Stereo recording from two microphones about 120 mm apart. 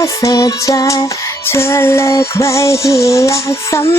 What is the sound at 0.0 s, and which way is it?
Speech, 30° left (ahead or behind).